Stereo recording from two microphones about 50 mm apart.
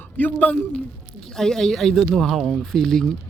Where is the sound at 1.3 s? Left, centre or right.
Centre.